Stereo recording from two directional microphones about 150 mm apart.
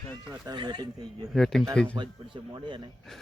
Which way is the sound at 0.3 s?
25° right (ahead or behind).